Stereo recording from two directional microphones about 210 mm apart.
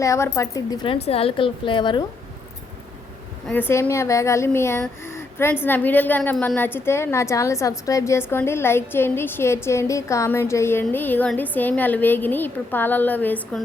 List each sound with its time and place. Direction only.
0.0 s a woman's voice: 15° left (ahead or behind)
3.4 s speech: 10° left (ahead or behind)